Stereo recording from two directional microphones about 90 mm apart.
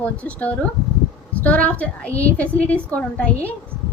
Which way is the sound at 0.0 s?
15° left (ahead or behind).